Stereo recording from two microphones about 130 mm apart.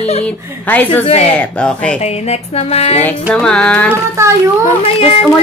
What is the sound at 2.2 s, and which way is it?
Music, 55° left (ahead or behind).